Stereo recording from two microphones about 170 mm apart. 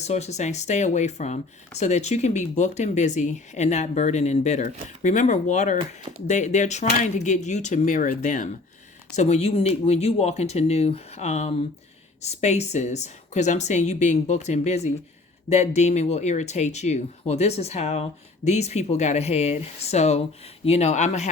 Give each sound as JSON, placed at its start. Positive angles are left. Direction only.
{"t": 0.0, "sound": "speech", "side_deg": 40}